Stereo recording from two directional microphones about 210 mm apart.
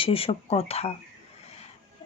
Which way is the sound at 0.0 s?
25° left (ahead or behind).